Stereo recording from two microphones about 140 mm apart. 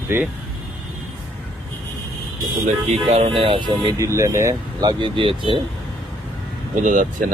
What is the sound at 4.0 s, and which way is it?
Speech, 20° right (ahead or behind).